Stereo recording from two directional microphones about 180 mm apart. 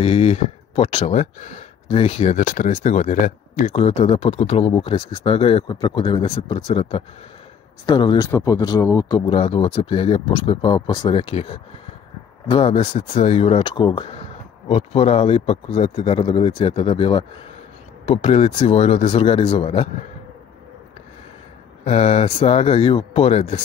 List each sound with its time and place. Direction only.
0.0 s speech: 35° left (ahead or behind)
21.8 s speech: 35° left (ahead or behind)